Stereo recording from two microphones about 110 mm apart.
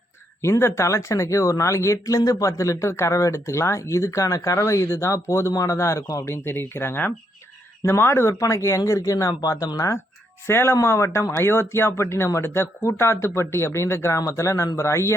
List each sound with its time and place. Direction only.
0.4 s speech: 25° left (ahead or behind)